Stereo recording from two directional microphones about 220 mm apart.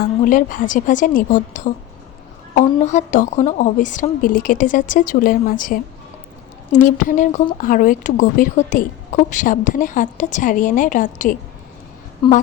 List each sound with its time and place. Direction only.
0.0 s a woman's voice: 40° left (ahead or behind)